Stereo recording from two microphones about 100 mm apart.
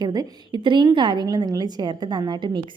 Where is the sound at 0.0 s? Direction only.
40° right (ahead or behind).